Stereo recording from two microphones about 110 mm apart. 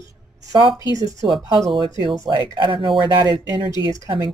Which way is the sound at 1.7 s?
50° right (ahead or behind).